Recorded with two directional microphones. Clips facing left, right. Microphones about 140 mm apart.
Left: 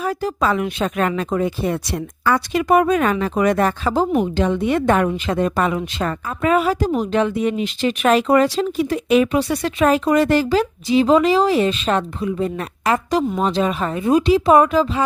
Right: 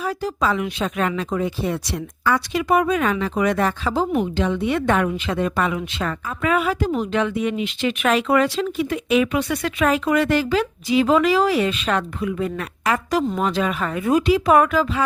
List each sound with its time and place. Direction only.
0.0 s speech: 50° left (ahead or behind); by 15.0 s 25° left (ahead or behind)